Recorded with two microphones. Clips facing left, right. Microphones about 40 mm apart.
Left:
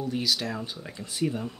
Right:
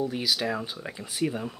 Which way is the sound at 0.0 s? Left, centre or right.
Centre.